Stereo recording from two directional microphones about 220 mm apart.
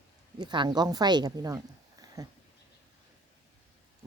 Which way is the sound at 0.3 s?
20° right (ahead or behind).